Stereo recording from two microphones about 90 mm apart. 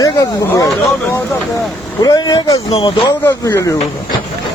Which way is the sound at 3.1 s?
40° left (ahead or behind).